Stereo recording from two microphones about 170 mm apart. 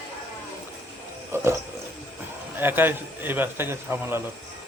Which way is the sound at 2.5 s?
10° right (ahead or behind).